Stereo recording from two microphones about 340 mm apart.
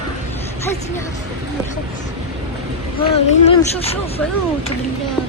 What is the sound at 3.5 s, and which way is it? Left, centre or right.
Speech, centre.